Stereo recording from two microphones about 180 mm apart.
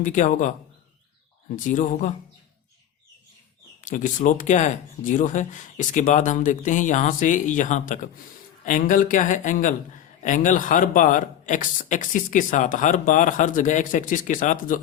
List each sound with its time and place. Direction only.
0.0 s a man's voice: 45° left (ahead or behind)
3.8 s a man's voice: 45° left (ahead or behind)